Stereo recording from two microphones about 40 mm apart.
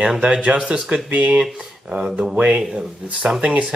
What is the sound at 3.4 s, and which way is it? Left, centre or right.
Speech, right.